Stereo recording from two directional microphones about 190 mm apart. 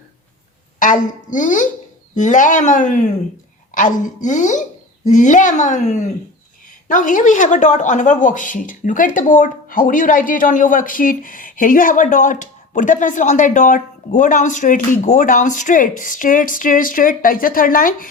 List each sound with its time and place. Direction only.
0.8 s a woman's voice: 45° left (ahead or behind)